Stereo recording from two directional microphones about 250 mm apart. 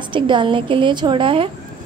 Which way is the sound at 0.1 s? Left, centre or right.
Centre.